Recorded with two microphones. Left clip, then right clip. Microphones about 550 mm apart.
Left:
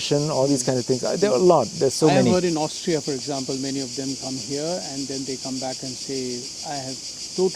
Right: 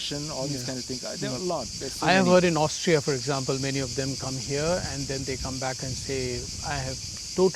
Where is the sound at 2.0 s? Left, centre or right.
Right.